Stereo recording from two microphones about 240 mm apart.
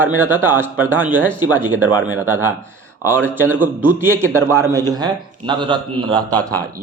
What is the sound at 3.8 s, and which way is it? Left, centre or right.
A man's voice, centre.